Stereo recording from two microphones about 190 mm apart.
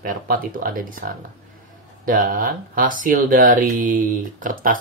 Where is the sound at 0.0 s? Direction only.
45° right (ahead or behind).